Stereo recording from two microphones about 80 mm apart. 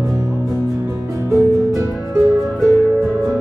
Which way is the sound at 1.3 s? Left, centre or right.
Right.